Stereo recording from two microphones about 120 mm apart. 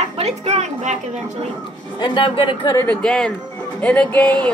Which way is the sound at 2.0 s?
40° left (ahead or behind).